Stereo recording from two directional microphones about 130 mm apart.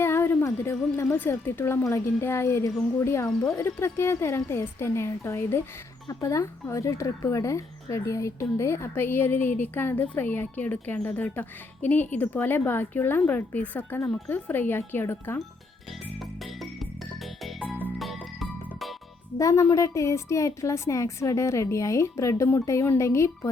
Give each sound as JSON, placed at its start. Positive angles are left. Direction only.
{"t": 0.0, "sound": "speech", "side_deg": 20}
{"t": 18.0, "sound": "music", "side_deg": 0}
{"t": 19.4, "sound": "speech", "side_deg": 25}